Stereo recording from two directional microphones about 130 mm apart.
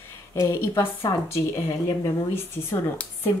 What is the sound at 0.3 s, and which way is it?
Speech, 25° left (ahead or behind).